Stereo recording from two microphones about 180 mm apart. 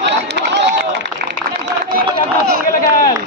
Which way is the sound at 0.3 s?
75° right (ahead or behind).